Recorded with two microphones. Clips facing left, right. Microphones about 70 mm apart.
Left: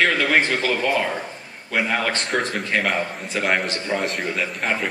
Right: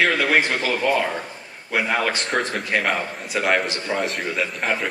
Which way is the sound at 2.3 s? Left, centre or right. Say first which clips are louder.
Even; centre.